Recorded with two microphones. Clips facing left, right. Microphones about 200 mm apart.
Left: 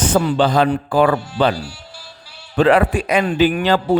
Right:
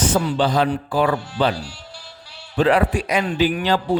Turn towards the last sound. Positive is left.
turn(degrees=65)  # may be behind; listen again after turning